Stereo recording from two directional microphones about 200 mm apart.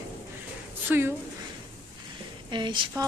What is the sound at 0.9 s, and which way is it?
Speech, 10° right (ahead or behind).